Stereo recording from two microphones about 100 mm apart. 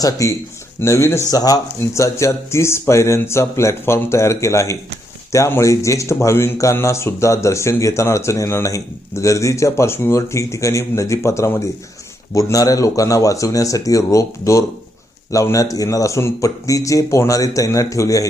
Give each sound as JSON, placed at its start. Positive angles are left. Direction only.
{"t": 0.0, "sound": "speech", "side_deg": 35}
{"t": 1.3, "sound": "speech", "side_deg": 40}